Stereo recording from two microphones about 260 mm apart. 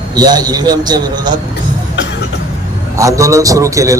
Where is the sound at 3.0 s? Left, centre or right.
Centre.